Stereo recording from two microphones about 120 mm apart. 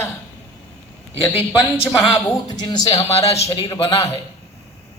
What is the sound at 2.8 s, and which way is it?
Speech, 60° left (ahead or behind).